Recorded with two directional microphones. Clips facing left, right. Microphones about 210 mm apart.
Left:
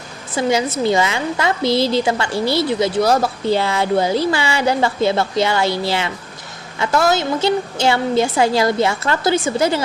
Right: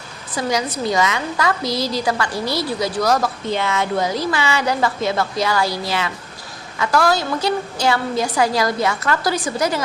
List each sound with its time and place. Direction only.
0.3 s a woman's voice: 25° left (ahead or behind)